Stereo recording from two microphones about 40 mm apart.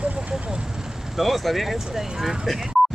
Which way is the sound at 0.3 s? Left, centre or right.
Centre.